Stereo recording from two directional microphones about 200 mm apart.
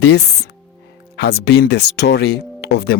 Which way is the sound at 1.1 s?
55° left (ahead or behind).